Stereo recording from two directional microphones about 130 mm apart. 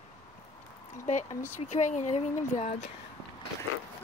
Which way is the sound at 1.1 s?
70° left (ahead or behind).